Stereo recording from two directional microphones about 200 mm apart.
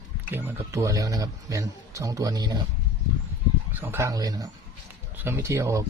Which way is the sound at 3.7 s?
10° right (ahead or behind).